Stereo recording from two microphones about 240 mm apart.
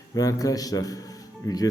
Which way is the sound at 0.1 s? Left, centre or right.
Centre.